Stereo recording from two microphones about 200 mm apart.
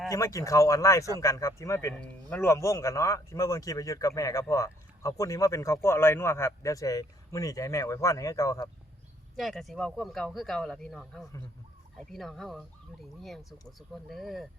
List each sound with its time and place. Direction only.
0.1 s a man's voice: 15° left (ahead or behind)
9.3 s speech: centre (ahead or behind)